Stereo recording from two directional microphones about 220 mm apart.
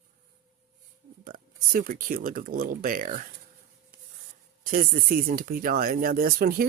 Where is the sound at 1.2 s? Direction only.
40° right (ahead or behind).